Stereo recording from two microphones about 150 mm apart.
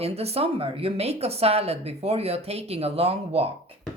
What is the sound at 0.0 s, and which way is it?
A woman's voice, 40° right (ahead or behind).